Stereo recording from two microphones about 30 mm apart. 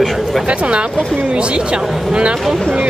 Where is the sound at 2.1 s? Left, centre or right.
Right.